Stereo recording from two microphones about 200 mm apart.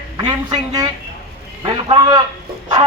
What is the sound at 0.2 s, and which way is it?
A man's voice, 20° right (ahead or behind).